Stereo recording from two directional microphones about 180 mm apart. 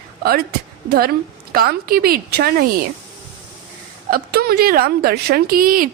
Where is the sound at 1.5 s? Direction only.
55° right (ahead or behind).